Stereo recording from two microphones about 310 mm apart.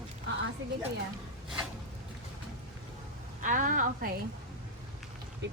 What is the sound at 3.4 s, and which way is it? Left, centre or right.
Speech, right.